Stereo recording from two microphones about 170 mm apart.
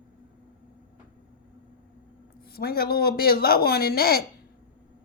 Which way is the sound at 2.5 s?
65° left (ahead or behind).